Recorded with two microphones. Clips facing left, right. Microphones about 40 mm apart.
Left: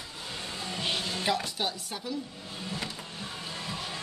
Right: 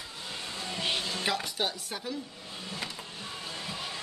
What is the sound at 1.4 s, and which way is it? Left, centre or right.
Speech, right.